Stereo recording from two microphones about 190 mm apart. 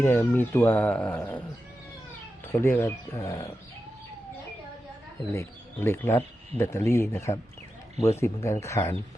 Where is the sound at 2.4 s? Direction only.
10° left (ahead or behind).